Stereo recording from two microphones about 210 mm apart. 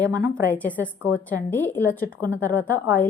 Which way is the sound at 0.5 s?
5° left (ahead or behind).